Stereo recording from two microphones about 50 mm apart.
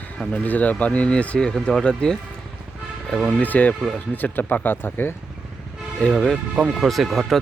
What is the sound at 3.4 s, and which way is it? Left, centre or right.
Speech, left.